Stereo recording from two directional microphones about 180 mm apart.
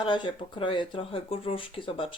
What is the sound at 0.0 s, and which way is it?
Speech, 30° left (ahead or behind).